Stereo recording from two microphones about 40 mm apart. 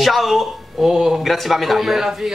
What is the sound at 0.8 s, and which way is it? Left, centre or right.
Speech, centre.